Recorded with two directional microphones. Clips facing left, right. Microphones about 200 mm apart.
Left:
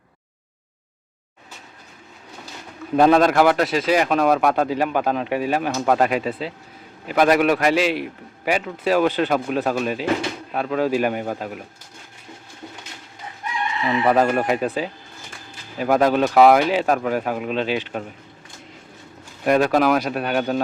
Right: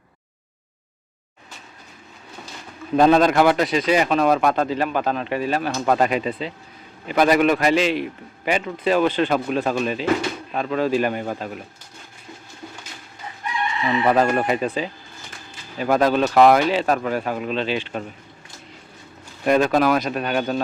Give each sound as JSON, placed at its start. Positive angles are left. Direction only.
{"t": 2.9, "sound": "a man's voice", "side_deg": 5}
{"t": 14.0, "sound": "speech", "side_deg": 5}
{"t": 15.8, "sound": "a man's voice", "side_deg": 10}
{"t": 19.5, "sound": "a man's voice", "side_deg": 5}